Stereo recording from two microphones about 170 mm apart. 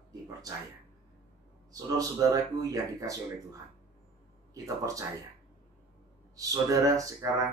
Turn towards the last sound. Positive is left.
turn(degrees=-20)  # may be behind; listen again after turning